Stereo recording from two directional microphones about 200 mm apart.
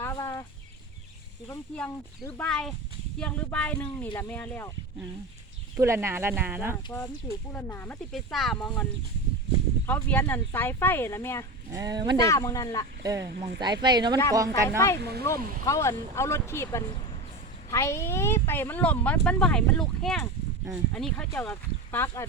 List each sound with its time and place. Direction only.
0.0 s a sound: 15° left (ahead or behind)
1.7 s speech: 5° left (ahead or behind)
5.7 s speech: 15° right (ahead or behind)
7.5 s speech: 10° left (ahead or behind)
11.7 s speech: 20° right (ahead or behind)
12.1 s speech: 15° left (ahead or behind)
13.1 s speech: 15° right (ahead or behind)
13.3 s speech: 50° right (ahead or behind)
13.8 s speech: 20° right (ahead or behind)
14.9 s speech: 55° right (ahead or behind)
15.6 s speech: 15° left (ahead or behind)